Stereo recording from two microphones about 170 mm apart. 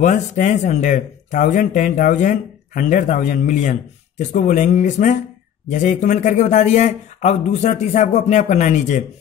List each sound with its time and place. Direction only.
0.0 s speech: 45° left (ahead or behind)